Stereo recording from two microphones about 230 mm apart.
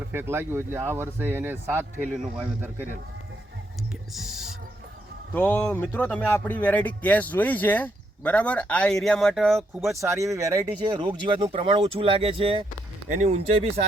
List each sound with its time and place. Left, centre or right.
0.1 s speech: centre
4.1 s owl: centre
5.3 s speech: centre
9.9 s speech: centre; by 13.8 s right